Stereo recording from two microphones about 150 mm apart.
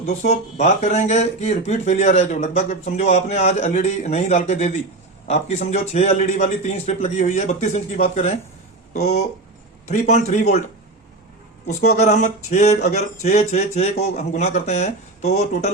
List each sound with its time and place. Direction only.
0.2 s speech: 50° left (ahead or behind)
11.9 s speech: 50° left (ahead or behind)